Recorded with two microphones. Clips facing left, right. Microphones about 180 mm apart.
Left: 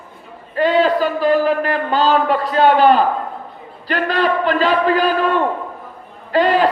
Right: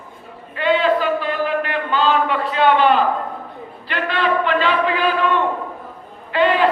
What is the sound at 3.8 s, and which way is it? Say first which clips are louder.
A man's voice: left 3 dB; 40° left (ahead or behind).